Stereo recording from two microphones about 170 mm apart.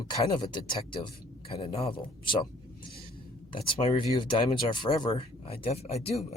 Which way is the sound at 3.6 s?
30° left (ahead or behind).